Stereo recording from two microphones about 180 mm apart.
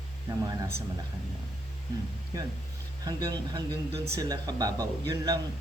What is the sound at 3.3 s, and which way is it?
A man's voice, 20° right (ahead or behind).